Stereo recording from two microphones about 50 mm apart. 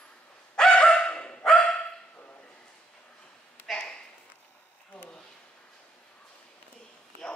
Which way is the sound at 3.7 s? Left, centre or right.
Centre.